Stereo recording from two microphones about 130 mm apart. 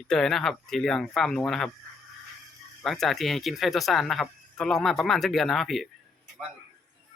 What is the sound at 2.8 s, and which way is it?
Speech, centre (ahead or behind).